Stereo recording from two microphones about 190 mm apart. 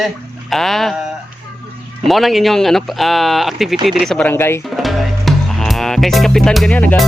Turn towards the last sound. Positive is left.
turn(degrees=10)  # may be behind; listen again after turning